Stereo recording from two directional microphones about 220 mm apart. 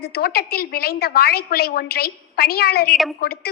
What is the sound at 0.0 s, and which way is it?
A woman's voice, 45° left (ahead or behind).